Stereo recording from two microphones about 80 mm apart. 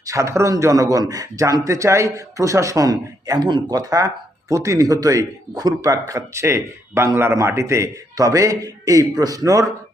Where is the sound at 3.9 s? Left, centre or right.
Right.